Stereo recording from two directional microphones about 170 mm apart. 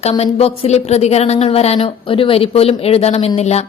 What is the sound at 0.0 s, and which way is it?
A woman's voice, 35° left (ahead or behind).